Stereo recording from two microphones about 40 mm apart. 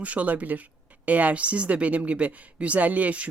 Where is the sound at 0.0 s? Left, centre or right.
Right.